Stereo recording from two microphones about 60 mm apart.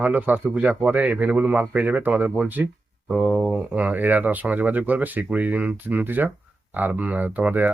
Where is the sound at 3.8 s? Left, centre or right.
Right.